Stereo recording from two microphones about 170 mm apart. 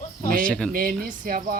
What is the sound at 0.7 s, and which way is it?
Speech, 55° right (ahead or behind).